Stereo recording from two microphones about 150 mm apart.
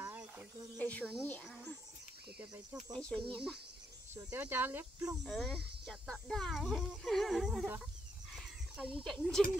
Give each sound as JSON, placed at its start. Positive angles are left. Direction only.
{"t": 0.0, "sound": "a sound", "side_deg": -15}
{"t": 0.7, "sound": "speech", "side_deg": 10}
{"t": 2.9, "sound": "speech", "side_deg": 5}
{"t": 4.1, "sound": "speech", "side_deg": -15}
{"t": 5.2, "sound": "speech", "side_deg": 0}
{"t": 7.6, "sound": "speech", "side_deg": -15}
{"t": 8.4, "sound": "a sound", "side_deg": -5}
{"t": 9.0, "sound": "speech", "side_deg": 0}